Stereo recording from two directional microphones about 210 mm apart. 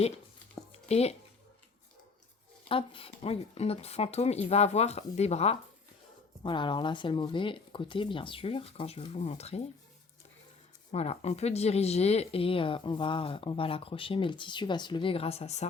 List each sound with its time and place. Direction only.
0.5 s a sound: 30° left (ahead or behind)
2.6 s speech: 25° left (ahead or behind)
10.9 s speech: 30° left (ahead or behind)